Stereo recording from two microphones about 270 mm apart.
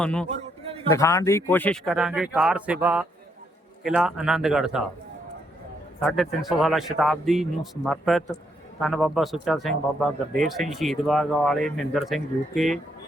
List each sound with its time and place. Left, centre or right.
0.0 s speech: centre
0.3 s a sound: right
0.9 s speech: centre
6.0 s speech: centre